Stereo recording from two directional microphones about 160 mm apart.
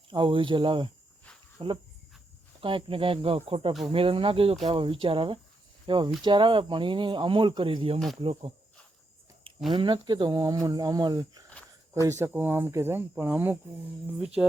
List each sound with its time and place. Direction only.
0.1 s speech: 30° right (ahead or behind)
9.7 s speech: 30° right (ahead or behind)
12.0 s speech: 15° right (ahead or behind)